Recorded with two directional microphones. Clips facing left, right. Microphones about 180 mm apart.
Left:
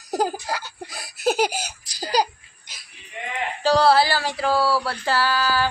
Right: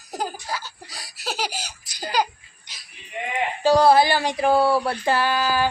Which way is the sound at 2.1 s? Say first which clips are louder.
Left 2 dB; 35° left (ahead or behind).